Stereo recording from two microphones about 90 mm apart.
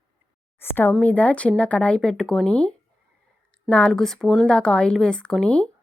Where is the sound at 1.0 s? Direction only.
15° left (ahead or behind).